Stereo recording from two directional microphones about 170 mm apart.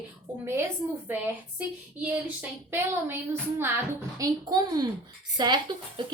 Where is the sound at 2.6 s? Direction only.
15° right (ahead or behind).